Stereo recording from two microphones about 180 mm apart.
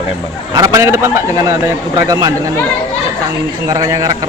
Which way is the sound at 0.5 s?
20° right (ahead or behind).